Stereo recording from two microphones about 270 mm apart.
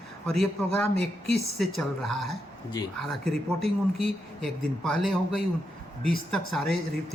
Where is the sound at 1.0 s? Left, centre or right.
Left.